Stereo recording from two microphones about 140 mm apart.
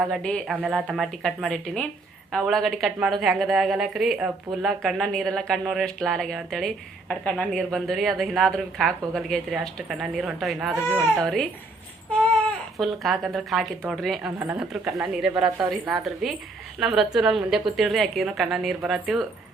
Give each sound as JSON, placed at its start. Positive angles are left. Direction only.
{"t": 0.0, "sound": "a woman's voice", "side_deg": 5}
{"t": 0.5, "sound": "a woman's voice", "side_deg": -10}
{"t": 12.8, "sound": "a woman's voice", "side_deg": 0}
{"t": 14.3, "sound": "a woman's voice", "side_deg": -20}
{"t": 14.6, "sound": "a woman's voice", "side_deg": -5}